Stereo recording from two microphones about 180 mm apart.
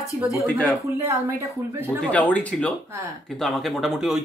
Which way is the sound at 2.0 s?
10° left (ahead or behind).